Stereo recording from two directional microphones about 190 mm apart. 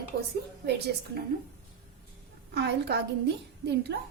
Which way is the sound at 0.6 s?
60° right (ahead or behind).